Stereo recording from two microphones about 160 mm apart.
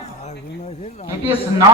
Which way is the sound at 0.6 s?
40° left (ahead or behind).